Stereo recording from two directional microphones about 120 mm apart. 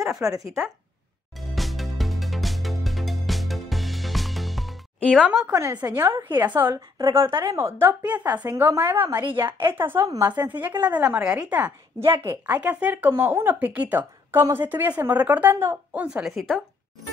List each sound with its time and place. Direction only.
0.2 s a woman's voice: 30° right (ahead or behind)
1.4 s music: centre (ahead or behind)
5.2 s speech: 5° right (ahead or behind)
5.5 s a woman's voice: 25° right (ahead or behind)
6.3 s a woman's voice: 15° right (ahead or behind)
12.0 s speech: 20° right (ahead or behind); by 16.6 s centre (ahead or behind)